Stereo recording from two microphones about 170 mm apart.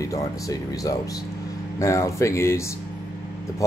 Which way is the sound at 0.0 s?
20° left (ahead or behind).